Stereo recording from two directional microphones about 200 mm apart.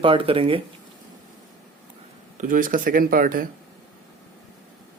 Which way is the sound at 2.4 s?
40° right (ahead or behind).